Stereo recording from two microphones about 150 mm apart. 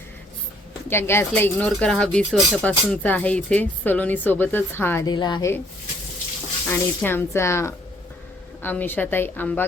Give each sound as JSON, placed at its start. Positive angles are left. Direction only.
{"t": 0.9, "sound": "speech", "side_deg": 15}
{"t": 5.0, "sound": "a woman's voice", "side_deg": 30}
{"t": 6.7, "sound": "speech", "side_deg": 15}